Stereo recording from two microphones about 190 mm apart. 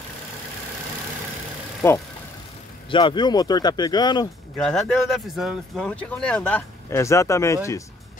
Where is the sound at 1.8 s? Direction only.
15° left (ahead or behind).